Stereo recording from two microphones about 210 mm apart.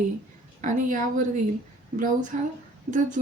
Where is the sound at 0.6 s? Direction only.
40° right (ahead or behind).